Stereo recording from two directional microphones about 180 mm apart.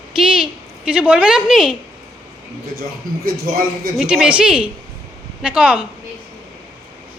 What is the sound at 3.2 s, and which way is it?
Speech, 55° right (ahead or behind).